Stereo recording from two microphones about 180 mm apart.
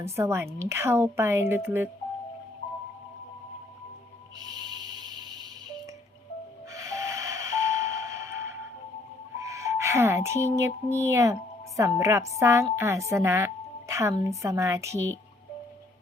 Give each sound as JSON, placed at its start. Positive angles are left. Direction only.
{"t": 0.0, "sound": "a woman's voice", "side_deg": -15}
{"t": 4.5, "sound": "music", "side_deg": -25}
{"t": 6.7, "sound": "a sound", "side_deg": -15}
{"t": 9.4, "sound": "music", "side_deg": -15}
{"t": 10.9, "sound": "a woman's voice", "side_deg": -15}